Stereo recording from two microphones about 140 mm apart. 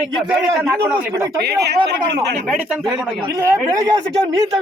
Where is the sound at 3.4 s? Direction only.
20° right (ahead or behind).